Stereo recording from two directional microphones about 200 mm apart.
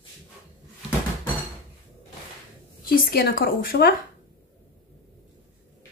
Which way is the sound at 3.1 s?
50° left (ahead or behind).